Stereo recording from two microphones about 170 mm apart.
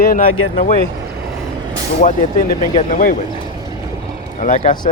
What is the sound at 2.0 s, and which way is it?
Speech, 50° left (ahead or behind).